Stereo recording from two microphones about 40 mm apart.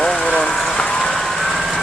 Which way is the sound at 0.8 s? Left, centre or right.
Centre.